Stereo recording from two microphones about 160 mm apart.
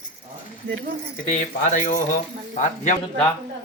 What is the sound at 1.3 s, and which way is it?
Speech, 45° left (ahead or behind).